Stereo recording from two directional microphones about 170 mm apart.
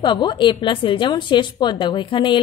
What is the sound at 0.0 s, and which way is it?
A woman's voice, 25° left (ahead or behind).